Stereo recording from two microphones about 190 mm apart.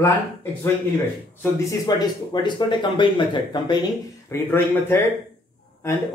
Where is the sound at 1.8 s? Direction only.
25° left (ahead or behind).